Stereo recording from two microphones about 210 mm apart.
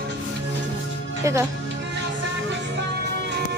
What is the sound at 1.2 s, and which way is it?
Speech, 15° right (ahead or behind).